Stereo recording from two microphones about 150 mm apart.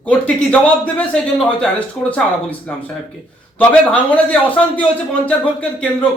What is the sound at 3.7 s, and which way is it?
Speech, 10° left (ahead or behind).